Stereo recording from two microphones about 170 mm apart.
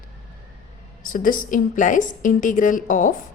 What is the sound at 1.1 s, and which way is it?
Speech, 55° left (ahead or behind).